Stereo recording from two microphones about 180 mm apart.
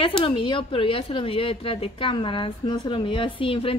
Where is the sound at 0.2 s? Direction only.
30° left (ahead or behind).